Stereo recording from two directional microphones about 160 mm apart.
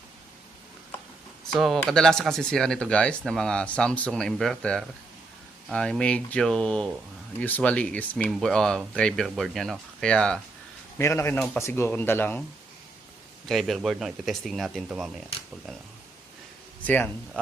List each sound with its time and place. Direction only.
1.5 s speech: centre (ahead or behind)
10.9 s speech: 15° left (ahead or behind)
11.3 s speech: 5° left (ahead or behind)
11.6 s speech: 15° left (ahead or behind)
13.4 s speech: centre (ahead or behind)
16.8 s speech: 10° left (ahead or behind)